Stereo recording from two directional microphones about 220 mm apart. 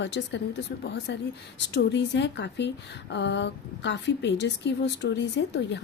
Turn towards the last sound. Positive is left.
turn(degrees=50)  # may be behind; listen again after turning